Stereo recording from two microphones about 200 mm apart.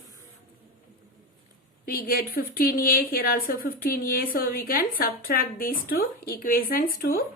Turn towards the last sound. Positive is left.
turn(degrees=45)  # may be behind; listen again after turning